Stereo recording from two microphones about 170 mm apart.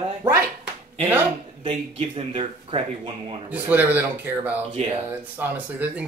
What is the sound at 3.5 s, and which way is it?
Speech, 10° right (ahead or behind).